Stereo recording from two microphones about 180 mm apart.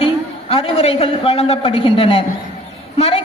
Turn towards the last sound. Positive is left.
turn(degrees=35)  # may be behind; listen again after turning